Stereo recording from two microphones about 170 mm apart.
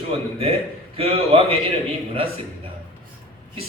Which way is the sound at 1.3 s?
30° right (ahead or behind).